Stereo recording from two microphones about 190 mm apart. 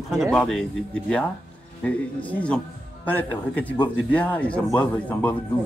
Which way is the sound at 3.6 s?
10° left (ahead or behind).